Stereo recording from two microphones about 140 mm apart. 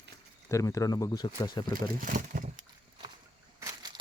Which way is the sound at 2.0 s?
75° right (ahead or behind).